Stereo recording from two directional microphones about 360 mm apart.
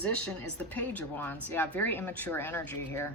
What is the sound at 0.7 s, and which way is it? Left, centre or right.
A woman's voice, centre.